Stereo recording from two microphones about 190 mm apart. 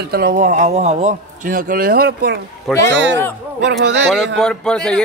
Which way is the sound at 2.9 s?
70° right (ahead or behind).